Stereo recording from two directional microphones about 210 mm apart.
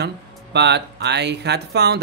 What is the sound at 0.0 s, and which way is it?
Speech, 55° right (ahead or behind).